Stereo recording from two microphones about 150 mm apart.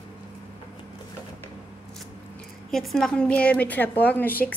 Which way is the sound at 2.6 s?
Centre (ahead or behind).